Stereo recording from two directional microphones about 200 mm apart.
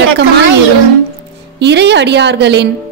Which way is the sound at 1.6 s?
60° right (ahead or behind).